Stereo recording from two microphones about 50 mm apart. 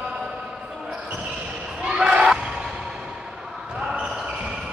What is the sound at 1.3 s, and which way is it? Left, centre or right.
Basketball bounce, centre.